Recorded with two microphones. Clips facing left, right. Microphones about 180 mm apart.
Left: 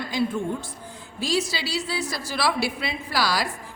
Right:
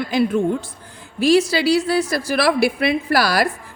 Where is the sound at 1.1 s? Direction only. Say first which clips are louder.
Right 11 dB; 65° right (ahead or behind).